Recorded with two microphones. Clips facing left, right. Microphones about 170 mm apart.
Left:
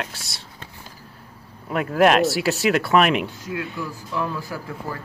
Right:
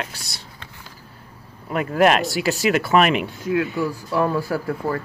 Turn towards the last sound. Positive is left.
turn(degrees=-55)  # may be behind; listen again after turning